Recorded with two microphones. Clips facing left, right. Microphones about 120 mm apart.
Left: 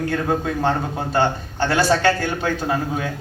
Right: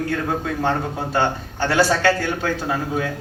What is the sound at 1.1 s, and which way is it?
Speech, 20° left (ahead or behind).